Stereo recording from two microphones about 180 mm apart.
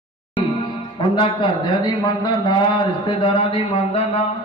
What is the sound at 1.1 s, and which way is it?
A man's voice, 25° left (ahead or behind).